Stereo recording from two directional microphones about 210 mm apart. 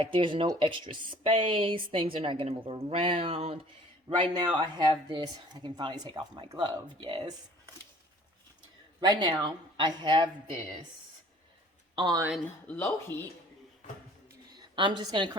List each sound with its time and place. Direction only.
0.1 s speech: 25° right (ahead or behind)
9.0 s speech: 20° right (ahead or behind)
11.9 s speech: 20° right (ahead or behind)
12.6 s speech: 10° left (ahead or behind)
14.5 s a woman's voice: 20° right (ahead or behind)